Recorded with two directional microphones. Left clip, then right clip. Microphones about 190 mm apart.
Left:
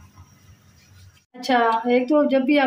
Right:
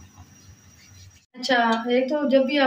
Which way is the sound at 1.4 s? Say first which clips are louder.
Left 2 dB; 65° left (ahead or behind).